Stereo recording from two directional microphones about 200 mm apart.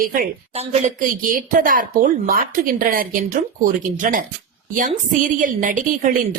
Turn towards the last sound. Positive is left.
turn(degrees=-40)  # may be behind; listen again after turning